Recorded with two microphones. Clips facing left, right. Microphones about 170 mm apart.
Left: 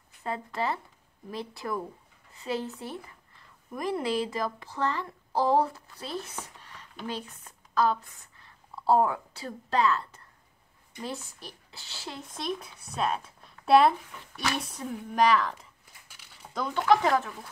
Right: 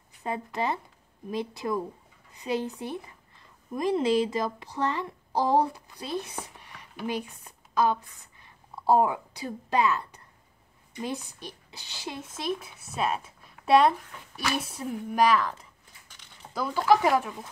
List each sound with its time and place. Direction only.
0.2 s a woman's voice: 20° right (ahead or behind)